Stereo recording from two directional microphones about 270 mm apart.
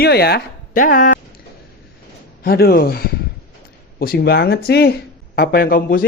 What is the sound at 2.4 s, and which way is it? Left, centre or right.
Speech, left.